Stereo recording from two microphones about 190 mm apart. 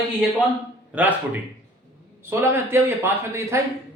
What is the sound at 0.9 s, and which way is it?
A man's voice, 10° right (ahead or behind).